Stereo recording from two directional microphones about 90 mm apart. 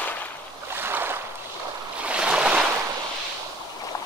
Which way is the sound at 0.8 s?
25° right (ahead or behind).